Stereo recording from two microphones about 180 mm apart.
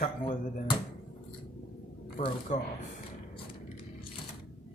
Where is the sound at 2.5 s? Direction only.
40° left (ahead or behind).